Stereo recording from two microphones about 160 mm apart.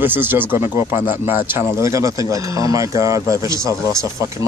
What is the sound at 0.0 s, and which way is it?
Speech, 10° right (ahead or behind).